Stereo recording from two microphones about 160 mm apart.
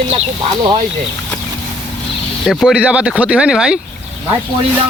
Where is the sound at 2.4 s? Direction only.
Centre (ahead or behind).